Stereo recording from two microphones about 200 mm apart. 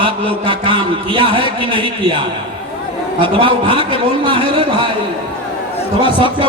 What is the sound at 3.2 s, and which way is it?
A man's voice, 25° right (ahead or behind).